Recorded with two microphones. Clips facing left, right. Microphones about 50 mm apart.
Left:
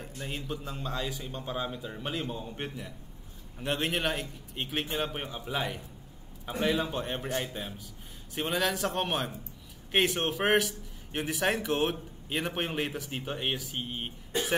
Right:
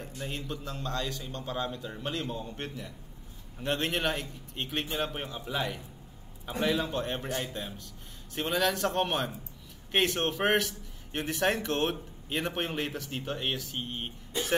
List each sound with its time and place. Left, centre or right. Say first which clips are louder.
0.2 s a man's voice: left 1 dB; centre
7.2 s a man's voice: left 1 dB; left
7.5 s a man's voice: even; centre